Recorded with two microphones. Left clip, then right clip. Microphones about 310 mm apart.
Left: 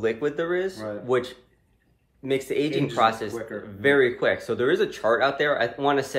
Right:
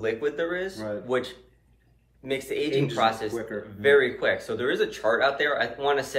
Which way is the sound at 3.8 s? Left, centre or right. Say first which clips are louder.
Even; left.